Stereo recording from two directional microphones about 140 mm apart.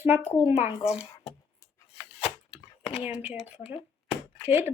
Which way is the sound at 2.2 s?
45° left (ahead or behind).